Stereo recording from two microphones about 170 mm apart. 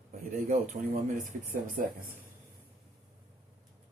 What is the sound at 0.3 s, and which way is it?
Speech, 50° right (ahead or behind).